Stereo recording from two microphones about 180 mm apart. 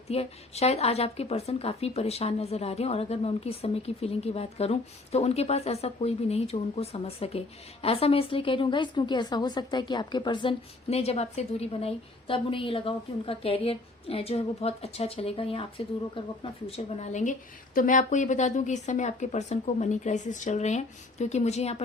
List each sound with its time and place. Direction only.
0.1 s a woman's voice: 35° left (ahead or behind)